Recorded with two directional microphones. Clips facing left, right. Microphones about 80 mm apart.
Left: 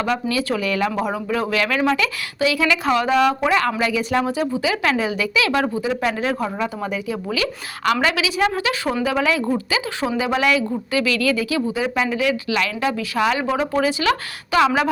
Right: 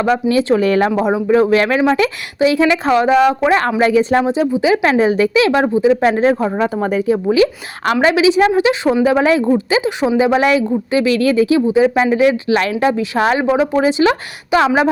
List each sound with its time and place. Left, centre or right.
0.0 s speech: right
6.0 s speech: right
9.0 s speech: right
13.4 s speech: right